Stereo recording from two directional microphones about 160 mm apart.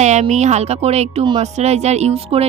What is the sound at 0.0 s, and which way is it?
Speech, 45° right (ahead or behind).